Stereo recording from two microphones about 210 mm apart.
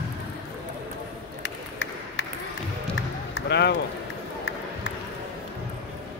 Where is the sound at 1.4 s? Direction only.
60° left (ahead or behind).